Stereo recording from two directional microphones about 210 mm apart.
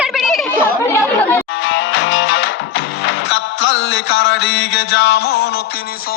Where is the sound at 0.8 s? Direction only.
15° left (ahead or behind).